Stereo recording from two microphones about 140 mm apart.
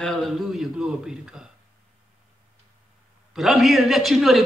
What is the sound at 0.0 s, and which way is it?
A man's voice, 5° left (ahead or behind).